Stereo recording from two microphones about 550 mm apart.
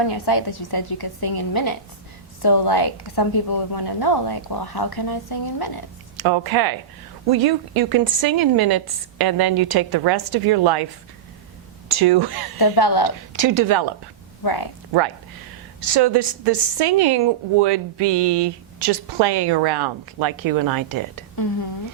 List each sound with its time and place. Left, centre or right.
0.0 s a woman's voice: left
6.1 s a woman's voice: right
11.9 s a woman's voice: right
12.5 s a woman's voice: left
13.3 s a woman's voice: right
14.4 s a woman's voice: left
15.9 s a woman's voice: right